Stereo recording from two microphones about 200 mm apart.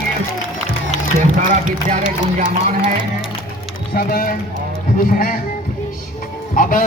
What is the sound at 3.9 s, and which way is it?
Speech, 45° left (ahead or behind).